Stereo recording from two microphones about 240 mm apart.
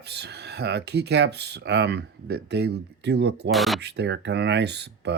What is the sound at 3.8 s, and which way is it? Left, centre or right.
Speech, right.